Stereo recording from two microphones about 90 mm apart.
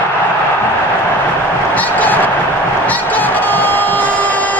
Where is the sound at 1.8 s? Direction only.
20° left (ahead or behind).